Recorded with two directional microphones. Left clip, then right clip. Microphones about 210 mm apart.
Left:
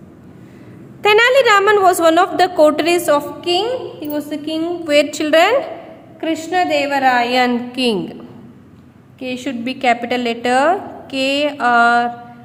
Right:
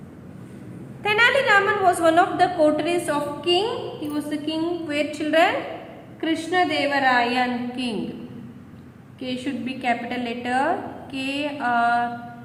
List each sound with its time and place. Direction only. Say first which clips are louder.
1.0 s a woman's voice: left 7 dB; 55° left (ahead or behind)
9.2 s a woman's voice: left 6 dB; 50° left (ahead or behind)